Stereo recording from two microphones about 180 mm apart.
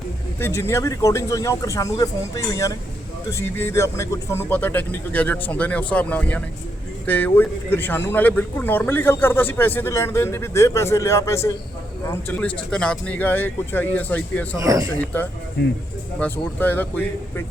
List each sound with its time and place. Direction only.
0.3 s speech: 15° left (ahead or behind)
14.6 s speech: 20° right (ahead or behind)
14.9 s speech: 10° left (ahead or behind)